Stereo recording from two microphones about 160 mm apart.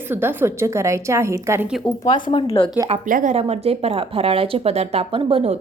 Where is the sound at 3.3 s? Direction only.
40° right (ahead or behind).